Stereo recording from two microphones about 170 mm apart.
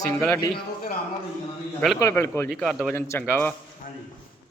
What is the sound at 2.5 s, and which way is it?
Speech, centre (ahead or behind).